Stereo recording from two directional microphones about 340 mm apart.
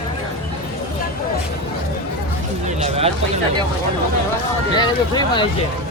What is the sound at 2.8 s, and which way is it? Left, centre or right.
Speech, centre.